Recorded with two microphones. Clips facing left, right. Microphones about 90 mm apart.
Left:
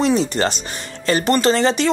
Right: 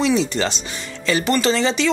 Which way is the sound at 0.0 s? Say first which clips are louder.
Left 1 dB; 45° left (ahead or behind).